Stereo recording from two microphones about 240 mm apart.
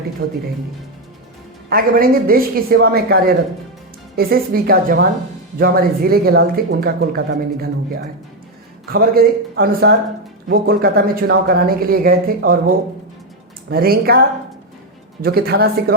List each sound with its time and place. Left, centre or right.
0.2 s speech: right
1.7 s speech: right
15.2 s speech: right